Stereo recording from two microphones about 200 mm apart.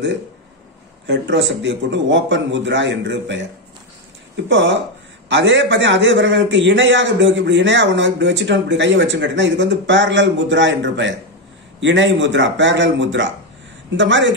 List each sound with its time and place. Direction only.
1.0 s a man's voice: 65° right (ahead or behind)
4.5 s a man's voice: 65° right (ahead or behind)